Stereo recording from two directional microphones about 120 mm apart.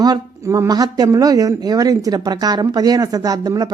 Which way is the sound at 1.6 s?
30° right (ahead or behind).